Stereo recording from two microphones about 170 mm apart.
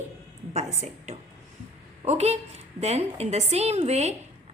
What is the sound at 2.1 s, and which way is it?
A woman's voice, 40° right (ahead or behind).